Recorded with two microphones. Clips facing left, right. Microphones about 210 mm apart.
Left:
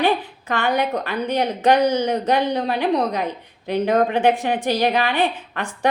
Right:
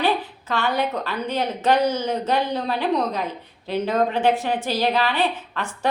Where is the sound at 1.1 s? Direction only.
15° left (ahead or behind).